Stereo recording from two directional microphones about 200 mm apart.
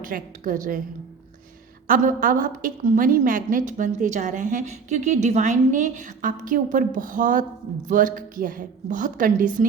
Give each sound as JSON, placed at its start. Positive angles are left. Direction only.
{"t": 0.0, "sound": "a woman's voice", "side_deg": -40}
{"t": 1.9, "sound": "a woman's voice", "side_deg": -45}